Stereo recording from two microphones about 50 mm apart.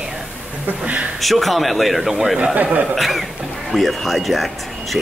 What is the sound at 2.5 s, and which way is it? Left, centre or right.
Speech, right.